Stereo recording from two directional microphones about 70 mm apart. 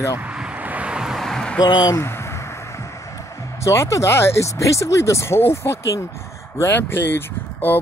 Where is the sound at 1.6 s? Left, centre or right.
Left.